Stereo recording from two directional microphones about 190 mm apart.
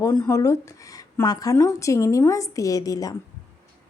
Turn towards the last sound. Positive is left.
turn(degrees=20)  # may be behind; listen again after turning